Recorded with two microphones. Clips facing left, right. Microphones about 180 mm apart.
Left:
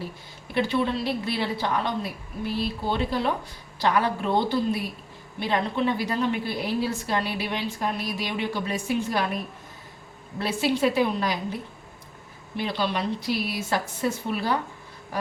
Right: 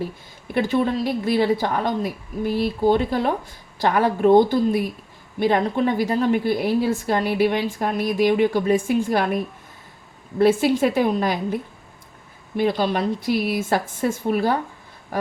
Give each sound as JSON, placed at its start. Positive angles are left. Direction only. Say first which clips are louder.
{"t": 0.5, "sound": "a woman's voice", "louder": "right 4 dB", "side_deg": -45}
{"t": 10.4, "sound": "a woman's voice", "louder": "right 7 dB", "side_deg": -50}
{"t": 12.5, "sound": "a woman's voice", "louder": "right 7 dB", "side_deg": -45}